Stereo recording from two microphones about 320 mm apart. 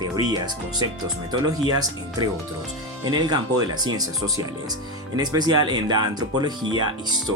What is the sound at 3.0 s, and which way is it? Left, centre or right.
Speech, centre.